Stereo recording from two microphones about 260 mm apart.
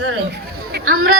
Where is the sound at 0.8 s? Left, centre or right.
Right.